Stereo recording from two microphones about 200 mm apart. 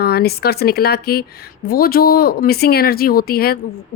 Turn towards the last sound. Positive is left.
turn(degrees=50)  # may be behind; listen again after turning